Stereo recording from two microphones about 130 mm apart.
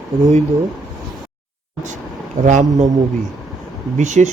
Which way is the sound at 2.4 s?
70° right (ahead or behind).